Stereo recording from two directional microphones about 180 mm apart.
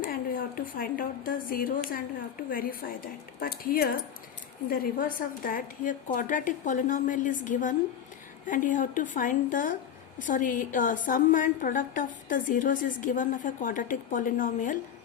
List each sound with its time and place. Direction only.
0.0 s a woman's voice: 50° left (ahead or behind)